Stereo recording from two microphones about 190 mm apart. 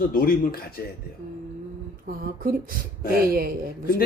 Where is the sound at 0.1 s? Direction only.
50° left (ahead or behind).